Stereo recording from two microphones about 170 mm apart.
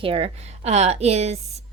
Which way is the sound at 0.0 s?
35° right (ahead or behind).